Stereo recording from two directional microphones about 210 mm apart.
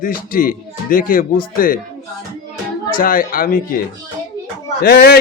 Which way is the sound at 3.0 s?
40° left (ahead or behind).